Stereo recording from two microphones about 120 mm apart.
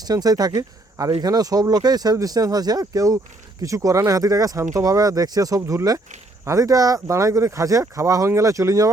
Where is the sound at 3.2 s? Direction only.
90° right.